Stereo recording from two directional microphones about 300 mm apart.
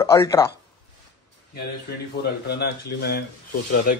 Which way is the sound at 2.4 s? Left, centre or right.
Left.